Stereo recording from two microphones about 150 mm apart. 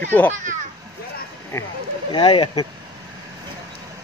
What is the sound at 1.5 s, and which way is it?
Speech, 15° left (ahead or behind).